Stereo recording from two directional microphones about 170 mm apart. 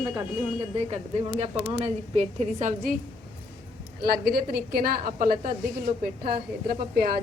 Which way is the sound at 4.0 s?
65° right (ahead or behind).